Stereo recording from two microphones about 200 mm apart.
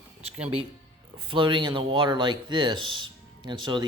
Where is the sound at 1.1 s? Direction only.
25° right (ahead or behind).